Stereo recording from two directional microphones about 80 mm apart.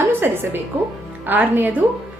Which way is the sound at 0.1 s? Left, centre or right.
Right.